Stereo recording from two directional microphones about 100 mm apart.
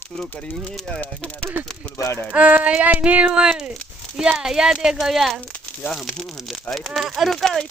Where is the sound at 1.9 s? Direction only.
30° left (ahead or behind).